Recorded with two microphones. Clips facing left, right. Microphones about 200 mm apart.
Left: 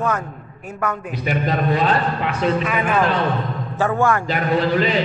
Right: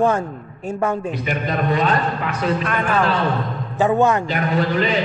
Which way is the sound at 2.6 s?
5° left (ahead or behind).